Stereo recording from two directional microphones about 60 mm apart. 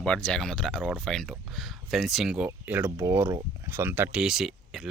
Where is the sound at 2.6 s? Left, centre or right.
Right.